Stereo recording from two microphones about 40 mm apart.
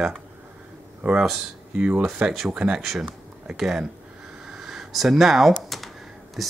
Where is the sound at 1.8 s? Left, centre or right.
Right.